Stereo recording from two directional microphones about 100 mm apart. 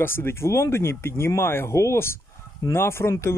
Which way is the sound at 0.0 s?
20° left (ahead or behind).